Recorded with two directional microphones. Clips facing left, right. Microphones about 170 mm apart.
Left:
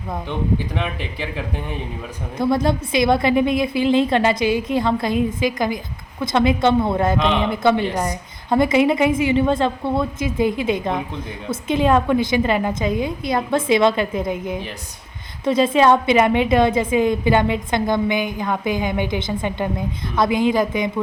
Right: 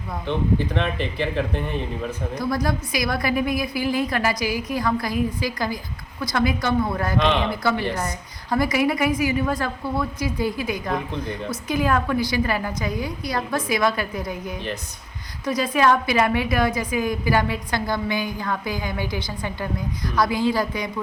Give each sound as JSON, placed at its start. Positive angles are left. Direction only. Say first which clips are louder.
{"t": 0.8, "sound": "speech", "louder": "right 2 dB", "side_deg": 5}
{"t": 2.4, "sound": "a woman's voice", "louder": "left 7 dB", "side_deg": 25}